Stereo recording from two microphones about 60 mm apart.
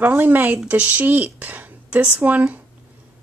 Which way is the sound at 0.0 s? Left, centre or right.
Right.